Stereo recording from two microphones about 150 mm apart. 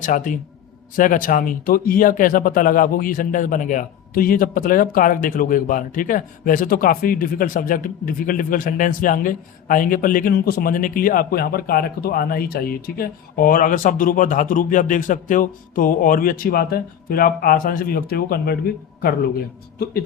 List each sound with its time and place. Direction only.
0.0 s speech: 60° left (ahead or behind); by 18.5 s 90° left